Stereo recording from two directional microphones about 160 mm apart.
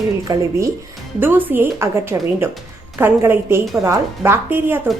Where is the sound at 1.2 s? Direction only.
10° right (ahead or behind).